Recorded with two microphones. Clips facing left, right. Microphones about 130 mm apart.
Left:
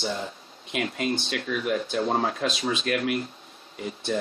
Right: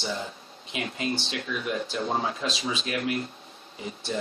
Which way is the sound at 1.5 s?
50° left (ahead or behind).